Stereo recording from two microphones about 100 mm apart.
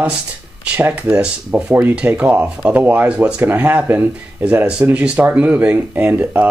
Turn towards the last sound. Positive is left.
turn(degrees=-20)  # may be behind; listen again after turning